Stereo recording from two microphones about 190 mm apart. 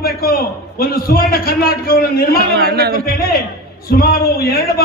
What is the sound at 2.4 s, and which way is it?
Speech, 55° right (ahead or behind).